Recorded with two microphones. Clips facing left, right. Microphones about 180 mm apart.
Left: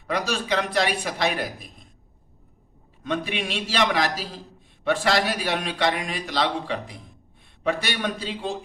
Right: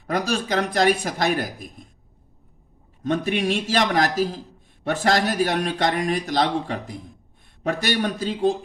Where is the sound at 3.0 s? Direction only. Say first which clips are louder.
Right 5 dB; 45° right (ahead or behind).